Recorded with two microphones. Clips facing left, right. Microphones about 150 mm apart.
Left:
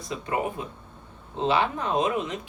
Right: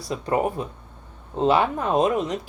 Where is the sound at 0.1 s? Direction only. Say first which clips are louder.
Right 5 dB; 40° right (ahead or behind).